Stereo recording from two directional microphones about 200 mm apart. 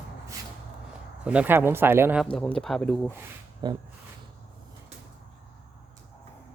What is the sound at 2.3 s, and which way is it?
Speech, 5° left (ahead or behind).